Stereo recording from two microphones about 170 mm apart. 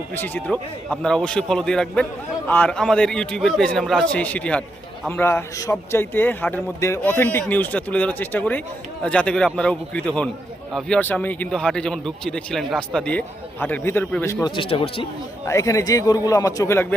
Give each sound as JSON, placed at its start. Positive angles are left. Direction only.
{"t": 0.2, "sound": "speech", "side_deg": 10}
{"t": 14.4, "sound": "speech", "side_deg": 30}
{"t": 15.4, "sound": "a man's voice", "side_deg": 20}